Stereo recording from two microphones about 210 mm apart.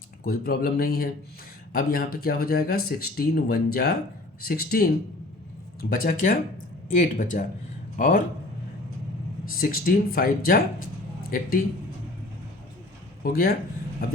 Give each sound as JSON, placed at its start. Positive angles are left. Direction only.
{"t": 0.3, "sound": "speech", "side_deg": 45}
{"t": 5.9, "sound": "speech", "side_deg": 45}
{"t": 9.6, "sound": "speech", "side_deg": 45}
{"t": 13.2, "sound": "speech", "side_deg": 45}